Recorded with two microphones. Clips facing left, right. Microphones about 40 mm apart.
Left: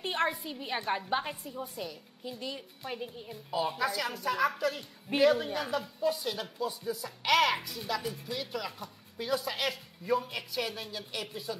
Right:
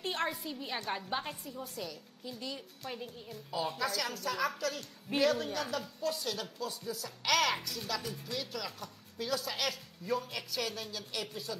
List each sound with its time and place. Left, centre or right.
0.2 s a woman's voice: centre